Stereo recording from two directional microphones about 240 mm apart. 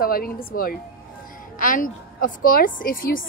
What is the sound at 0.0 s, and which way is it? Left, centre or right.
A woman's voice, left.